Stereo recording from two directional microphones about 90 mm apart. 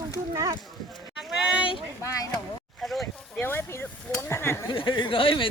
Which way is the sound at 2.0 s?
40° left (ahead or behind).